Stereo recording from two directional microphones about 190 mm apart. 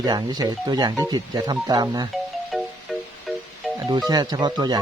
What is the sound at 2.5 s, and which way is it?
Music, centre (ahead or behind).